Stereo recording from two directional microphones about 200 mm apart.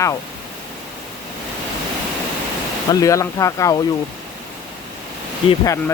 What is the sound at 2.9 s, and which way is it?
Speech, 15° left (ahead or behind).